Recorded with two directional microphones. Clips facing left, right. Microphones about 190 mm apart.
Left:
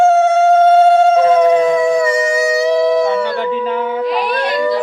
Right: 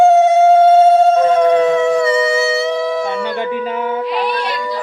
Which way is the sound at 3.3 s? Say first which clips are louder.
Left 2 dB; 15° right (ahead or behind).